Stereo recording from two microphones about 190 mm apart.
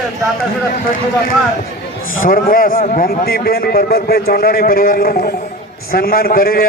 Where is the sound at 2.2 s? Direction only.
50° left (ahead or behind).